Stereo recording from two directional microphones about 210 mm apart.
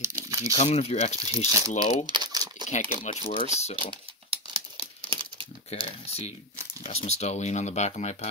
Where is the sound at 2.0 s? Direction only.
20° right (ahead or behind).